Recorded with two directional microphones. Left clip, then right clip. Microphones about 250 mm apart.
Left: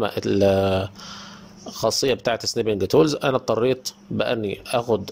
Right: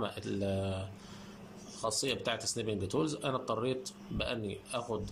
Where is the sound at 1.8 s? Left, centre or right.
Left.